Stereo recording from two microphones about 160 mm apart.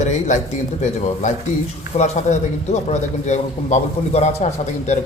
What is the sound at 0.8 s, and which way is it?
A man's voice, 45° left (ahead or behind).